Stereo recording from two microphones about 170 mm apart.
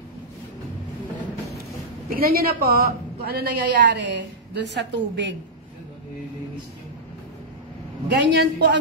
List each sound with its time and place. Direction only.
2.0 s a woman's voice: 60° right (ahead or behind); by 5.3 s 90° right
8.1 s a woman's voice: 80° right